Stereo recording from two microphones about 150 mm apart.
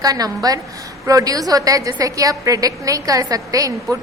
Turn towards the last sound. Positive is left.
turn(degrees=-25)  # may be behind; listen again after turning